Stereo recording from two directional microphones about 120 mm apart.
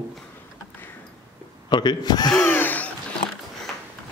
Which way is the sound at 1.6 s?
40° left (ahead or behind).